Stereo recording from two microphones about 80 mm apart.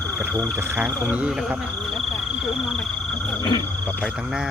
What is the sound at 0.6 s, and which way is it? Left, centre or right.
Speech, right.